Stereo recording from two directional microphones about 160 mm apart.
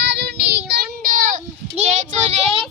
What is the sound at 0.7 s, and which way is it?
Child singing, 60° right (ahead or behind).